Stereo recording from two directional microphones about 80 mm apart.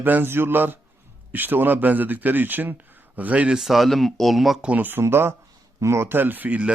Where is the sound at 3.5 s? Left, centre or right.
Centre.